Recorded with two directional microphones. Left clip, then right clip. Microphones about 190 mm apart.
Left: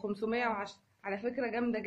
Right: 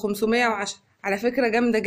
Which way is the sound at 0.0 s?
50° right (ahead or behind).